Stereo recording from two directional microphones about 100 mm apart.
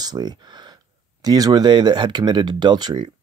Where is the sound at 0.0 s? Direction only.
45° right (ahead or behind).